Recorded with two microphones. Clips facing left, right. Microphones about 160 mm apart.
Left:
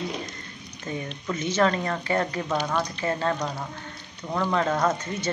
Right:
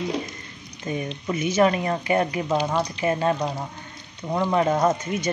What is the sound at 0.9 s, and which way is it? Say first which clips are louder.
Speech: right 4 dB; 15° right (ahead or behind).